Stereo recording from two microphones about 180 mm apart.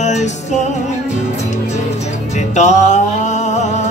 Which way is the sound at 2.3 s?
40° left (ahead or behind).